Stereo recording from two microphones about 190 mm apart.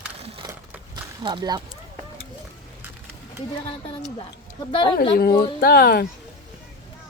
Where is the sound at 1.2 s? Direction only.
25° right (ahead or behind).